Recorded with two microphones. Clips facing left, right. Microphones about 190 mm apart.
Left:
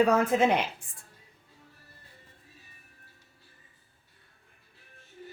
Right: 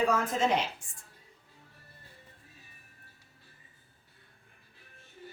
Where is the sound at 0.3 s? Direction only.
60° left (ahead or behind).